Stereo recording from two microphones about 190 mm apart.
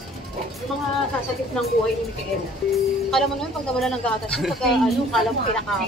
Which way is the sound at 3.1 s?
Centre (ahead or behind).